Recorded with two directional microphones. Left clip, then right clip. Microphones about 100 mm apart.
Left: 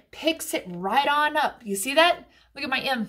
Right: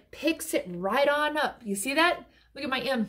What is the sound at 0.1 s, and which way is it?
A woman's voice, 35° left (ahead or behind).